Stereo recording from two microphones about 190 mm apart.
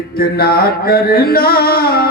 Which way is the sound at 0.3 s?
55° left (ahead or behind).